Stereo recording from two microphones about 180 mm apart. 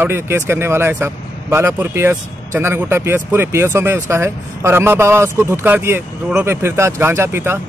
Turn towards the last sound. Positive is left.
turn(degrees=-15)  # may be behind; listen again after turning